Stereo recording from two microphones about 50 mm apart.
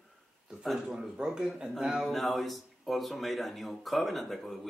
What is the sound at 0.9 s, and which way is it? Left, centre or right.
Speech, centre.